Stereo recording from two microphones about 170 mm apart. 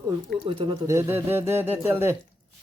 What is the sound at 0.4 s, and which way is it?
Speech, 30° right (ahead or behind).